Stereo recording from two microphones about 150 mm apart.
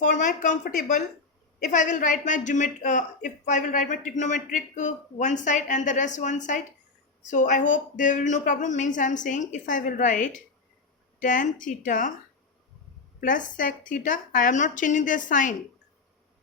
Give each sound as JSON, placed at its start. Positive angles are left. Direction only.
{"t": 0.0, "sound": "a woman's voice", "side_deg": 60}
{"t": 13.1, "sound": "a woman's voice", "side_deg": 60}